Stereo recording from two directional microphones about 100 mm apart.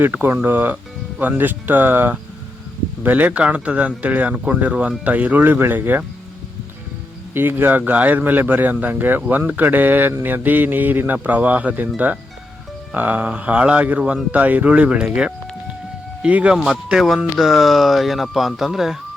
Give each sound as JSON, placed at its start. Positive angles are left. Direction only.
{"t": 0.0, "sound": "speech", "side_deg": -20}
{"t": 7.3, "sound": "speech", "side_deg": -20}